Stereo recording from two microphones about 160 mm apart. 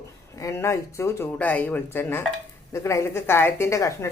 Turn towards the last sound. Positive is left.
turn(degrees=20)  # may be behind; listen again after turning